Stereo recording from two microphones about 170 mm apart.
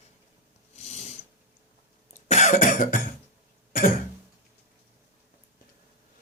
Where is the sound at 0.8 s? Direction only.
40° left (ahead or behind).